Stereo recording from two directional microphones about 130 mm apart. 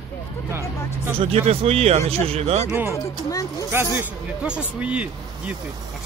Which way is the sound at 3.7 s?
15° right (ahead or behind).